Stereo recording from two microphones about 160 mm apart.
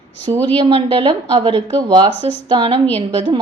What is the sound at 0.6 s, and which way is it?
A woman's voice, 35° right (ahead or behind).